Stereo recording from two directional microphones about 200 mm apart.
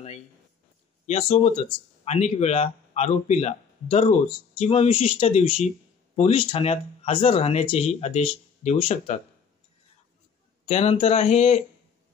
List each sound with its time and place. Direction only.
1.0 s speech: 35° left (ahead or behind)
10.6 s speech: 30° left (ahead or behind)